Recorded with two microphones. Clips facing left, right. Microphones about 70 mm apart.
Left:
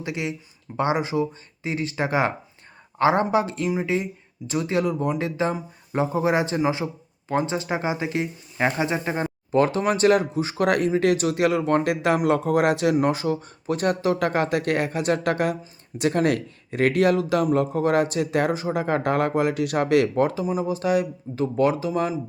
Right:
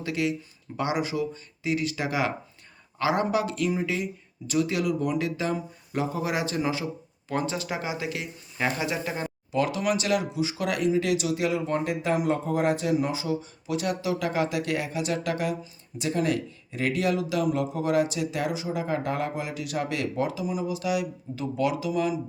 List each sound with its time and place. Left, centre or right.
0.0 s speech: left